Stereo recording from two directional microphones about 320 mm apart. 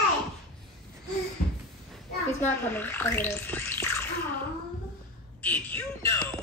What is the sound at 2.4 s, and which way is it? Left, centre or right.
Speech, centre.